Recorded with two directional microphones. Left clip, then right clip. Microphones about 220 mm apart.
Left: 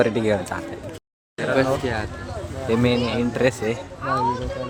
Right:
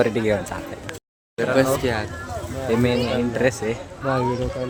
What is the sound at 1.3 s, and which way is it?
Speech, 35° right (ahead or behind).